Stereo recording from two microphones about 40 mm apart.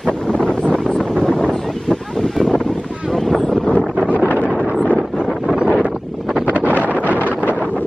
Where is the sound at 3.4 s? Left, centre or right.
Left.